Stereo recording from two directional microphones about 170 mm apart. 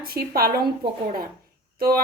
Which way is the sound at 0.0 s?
60° right (ahead or behind).